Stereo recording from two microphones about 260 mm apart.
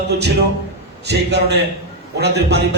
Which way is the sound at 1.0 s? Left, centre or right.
Right.